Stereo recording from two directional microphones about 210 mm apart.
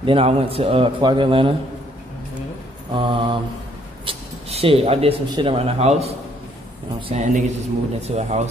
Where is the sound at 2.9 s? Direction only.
25° right (ahead or behind).